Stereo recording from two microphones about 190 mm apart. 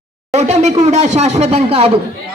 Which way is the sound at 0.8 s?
35° right (ahead or behind).